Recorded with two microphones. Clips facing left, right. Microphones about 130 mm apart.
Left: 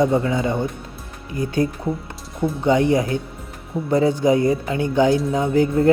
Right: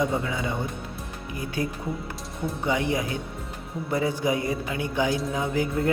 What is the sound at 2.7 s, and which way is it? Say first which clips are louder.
Speech: left 9 dB; 35° left (ahead or behind).